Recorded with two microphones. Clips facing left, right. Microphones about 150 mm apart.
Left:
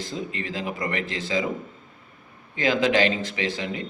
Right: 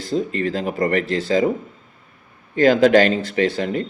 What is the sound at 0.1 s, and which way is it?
Speech, 40° right (ahead or behind).